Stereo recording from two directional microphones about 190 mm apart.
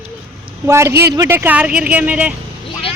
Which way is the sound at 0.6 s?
15° right (ahead or behind).